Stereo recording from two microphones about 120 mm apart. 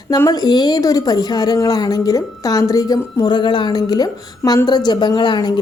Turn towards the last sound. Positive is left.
turn(degrees=35)  # may be behind; listen again after turning